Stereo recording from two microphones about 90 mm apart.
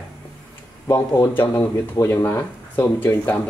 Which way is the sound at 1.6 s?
35° left (ahead or behind).